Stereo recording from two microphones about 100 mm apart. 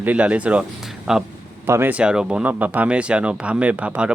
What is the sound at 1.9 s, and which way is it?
Speech, 10° right (ahead or behind).